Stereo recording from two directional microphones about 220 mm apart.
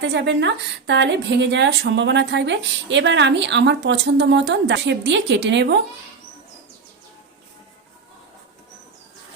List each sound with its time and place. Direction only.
0.0 s speech: 50° right (ahead or behind)